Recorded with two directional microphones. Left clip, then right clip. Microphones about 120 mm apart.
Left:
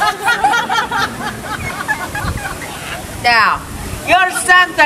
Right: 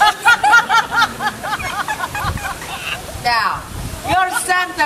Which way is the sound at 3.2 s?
15° left (ahead or behind).